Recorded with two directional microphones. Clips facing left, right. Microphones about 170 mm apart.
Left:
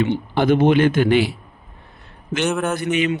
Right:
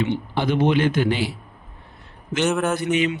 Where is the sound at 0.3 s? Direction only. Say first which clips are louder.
Left 5 dB; 50° left (ahead or behind).